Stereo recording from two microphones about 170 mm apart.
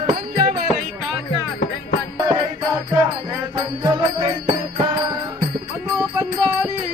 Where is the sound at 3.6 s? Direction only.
25° right (ahead or behind).